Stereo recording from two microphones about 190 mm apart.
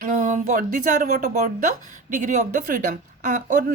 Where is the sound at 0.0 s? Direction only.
45° right (ahead or behind).